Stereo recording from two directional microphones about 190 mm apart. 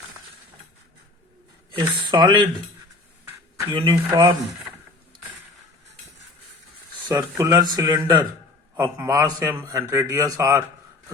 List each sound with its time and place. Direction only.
1.7 s speech: 25° right (ahead or behind)
3.7 s speech: 25° right (ahead or behind)
7.1 s a man's voice: 15° right (ahead or behind)